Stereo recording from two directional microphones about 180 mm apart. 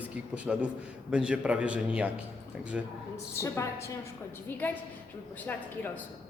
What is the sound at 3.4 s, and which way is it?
Speech, 15° left (ahead or behind).